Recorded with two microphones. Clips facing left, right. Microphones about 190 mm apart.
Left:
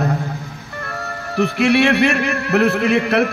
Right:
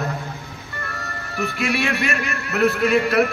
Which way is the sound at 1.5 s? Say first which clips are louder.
Left 9 dB; 65° left (ahead or behind).